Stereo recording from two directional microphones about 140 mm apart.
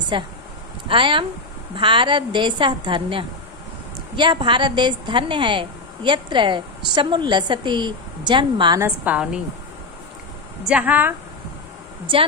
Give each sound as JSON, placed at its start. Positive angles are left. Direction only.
{"t": 0.1, "sound": "a woman's voice", "side_deg": -35}
{"t": 8.8, "sound": "a woman's voice", "side_deg": -10}
{"t": 10.7, "sound": "a woman's voice", "side_deg": -10}